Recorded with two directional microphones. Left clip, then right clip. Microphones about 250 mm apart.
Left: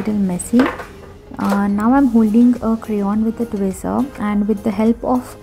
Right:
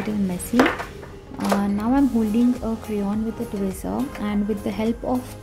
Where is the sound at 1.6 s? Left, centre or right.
Centre.